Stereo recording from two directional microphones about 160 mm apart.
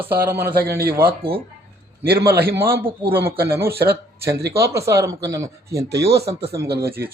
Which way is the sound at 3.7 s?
80° right.